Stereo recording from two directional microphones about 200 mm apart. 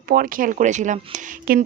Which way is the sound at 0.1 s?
45° right (ahead or behind).